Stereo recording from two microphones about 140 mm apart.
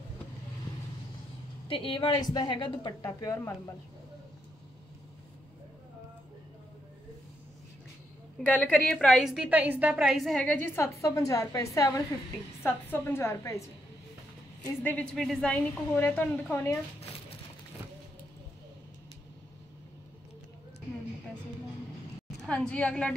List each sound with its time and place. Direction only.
1.7 s speech: 40° left (ahead or behind); by 3.7 s 20° left (ahead or behind)
8.5 s a woman's voice: 10° left (ahead or behind)
14.8 s a woman's voice: 10° left (ahead or behind)
22.4 s a woman's voice: 10° left (ahead or behind)